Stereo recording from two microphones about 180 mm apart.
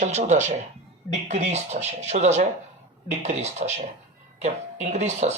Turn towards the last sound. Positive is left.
turn(degrees=-40)  # may be behind; listen again after turning